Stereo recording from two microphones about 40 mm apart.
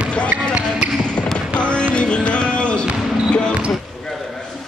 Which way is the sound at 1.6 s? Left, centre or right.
Left.